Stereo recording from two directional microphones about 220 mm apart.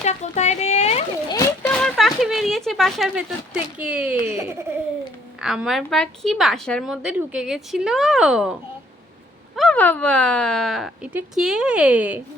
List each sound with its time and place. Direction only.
0.0 s a sound: 30° left (ahead or behind)
1.6 s speech: centre (ahead or behind)
5.4 s a woman's voice: centre (ahead or behind)
9.6 s a woman's voice: 5° left (ahead or behind)